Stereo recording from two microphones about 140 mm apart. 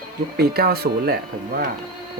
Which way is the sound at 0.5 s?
90° right.